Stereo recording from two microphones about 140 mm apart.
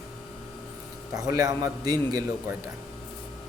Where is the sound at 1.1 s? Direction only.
25° right (ahead or behind).